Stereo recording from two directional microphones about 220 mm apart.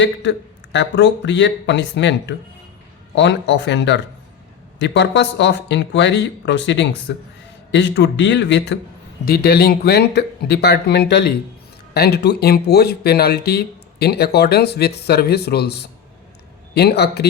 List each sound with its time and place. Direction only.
0.0 s speech: 55° left (ahead or behind)